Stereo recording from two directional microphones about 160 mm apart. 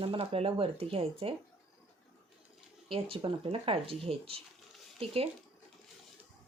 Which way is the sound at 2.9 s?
35° right (ahead or behind).